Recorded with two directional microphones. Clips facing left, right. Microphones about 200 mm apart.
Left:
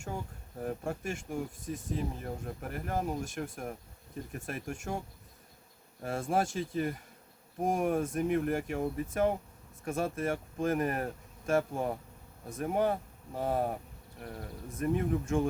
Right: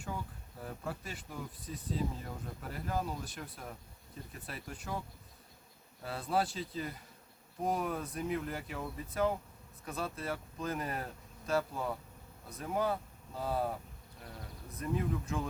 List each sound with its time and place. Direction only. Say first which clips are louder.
0.6 s speech: left 7 dB; 45° left (ahead or behind)